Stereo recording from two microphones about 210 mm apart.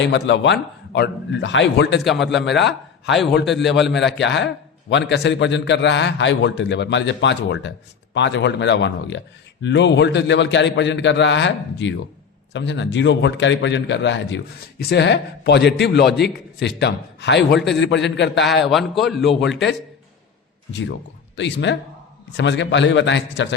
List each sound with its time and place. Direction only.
0.0 s a man's voice: 55° left (ahead or behind)
18.6 s a man's voice: centre (ahead or behind)
21.3 s a man's voice: 60° left (ahead or behind)